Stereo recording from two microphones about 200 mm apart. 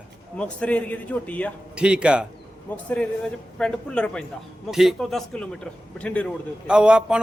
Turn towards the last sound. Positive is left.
turn(degrees=-5)  # may be behind; listen again after turning